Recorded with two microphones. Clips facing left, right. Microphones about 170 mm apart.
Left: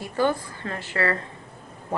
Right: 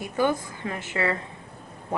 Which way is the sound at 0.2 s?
15° right (ahead or behind).